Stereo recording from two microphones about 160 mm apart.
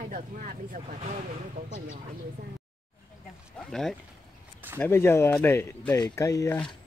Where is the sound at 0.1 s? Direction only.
60° right (ahead or behind).